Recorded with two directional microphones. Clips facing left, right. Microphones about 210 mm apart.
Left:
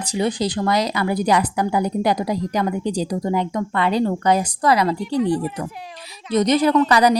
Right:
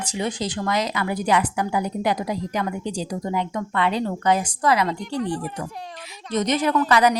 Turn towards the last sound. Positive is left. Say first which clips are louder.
# left 3 dB
turn(degrees=35)  # may be behind; listen again after turning